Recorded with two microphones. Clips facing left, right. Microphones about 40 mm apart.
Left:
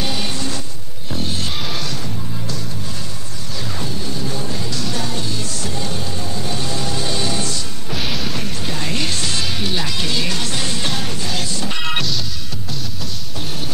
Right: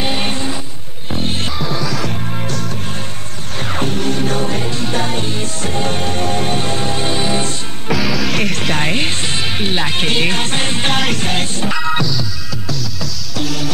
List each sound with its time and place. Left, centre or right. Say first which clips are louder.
0.0 s music: right 4 dB; right
2.3 s music: right 5 dB; right
3.7 s music: right 10 dB; right
4.6 s music: right 5 dB; right
8.3 s music: right 8 dB; right
8.8 s music: right 4 dB; right
11.0 s music: right 8 dB; right
11.2 s music: right 5 dB; right
13.4 s music: right 8 dB; right